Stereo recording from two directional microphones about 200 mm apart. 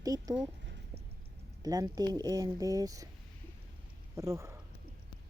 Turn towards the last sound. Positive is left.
turn(degrees=-15)  # may be behind; listen again after turning